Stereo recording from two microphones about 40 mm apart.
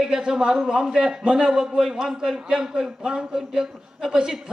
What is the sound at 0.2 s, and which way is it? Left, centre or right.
A man's voice, centre.